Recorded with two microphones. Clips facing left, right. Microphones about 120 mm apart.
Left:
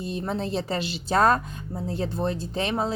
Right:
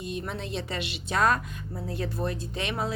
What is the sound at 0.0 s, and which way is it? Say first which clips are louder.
Speech: left 5 dB; 35° left (ahead or behind).